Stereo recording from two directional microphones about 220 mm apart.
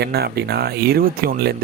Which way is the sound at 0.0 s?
45° right (ahead or behind).